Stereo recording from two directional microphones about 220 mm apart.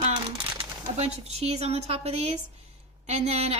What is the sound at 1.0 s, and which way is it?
Speech, 30° right (ahead or behind).